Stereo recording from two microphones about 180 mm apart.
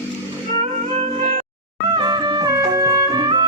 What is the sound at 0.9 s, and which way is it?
Music, 35° right (ahead or behind).